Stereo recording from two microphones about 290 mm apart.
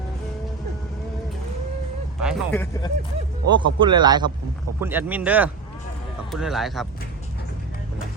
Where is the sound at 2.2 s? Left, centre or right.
Centre.